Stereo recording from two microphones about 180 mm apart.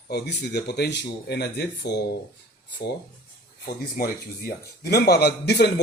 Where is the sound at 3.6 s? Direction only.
55° left (ahead or behind).